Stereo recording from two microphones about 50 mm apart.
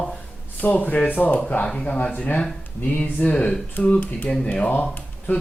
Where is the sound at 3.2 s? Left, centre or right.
Left.